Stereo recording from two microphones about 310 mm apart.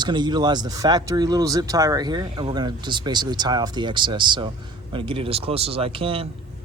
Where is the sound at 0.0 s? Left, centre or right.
Centre.